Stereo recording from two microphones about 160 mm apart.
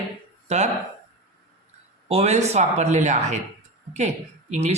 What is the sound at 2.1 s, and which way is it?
Speech, 45° right (ahead or behind).